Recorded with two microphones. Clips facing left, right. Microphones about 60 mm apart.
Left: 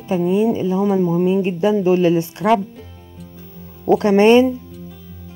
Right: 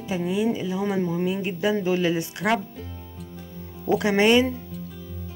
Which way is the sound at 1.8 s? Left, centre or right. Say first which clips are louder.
Left 8 dB; left.